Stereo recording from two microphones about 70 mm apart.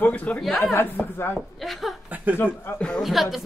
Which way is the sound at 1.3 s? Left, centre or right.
Centre.